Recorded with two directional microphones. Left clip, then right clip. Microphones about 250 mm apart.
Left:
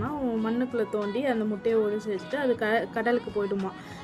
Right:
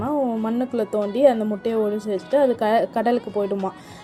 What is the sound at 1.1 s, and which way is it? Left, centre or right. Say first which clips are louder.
Speech: right 11 dB; centre.